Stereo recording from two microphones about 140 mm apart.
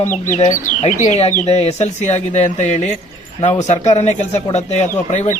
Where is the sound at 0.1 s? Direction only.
60° left (ahead or behind).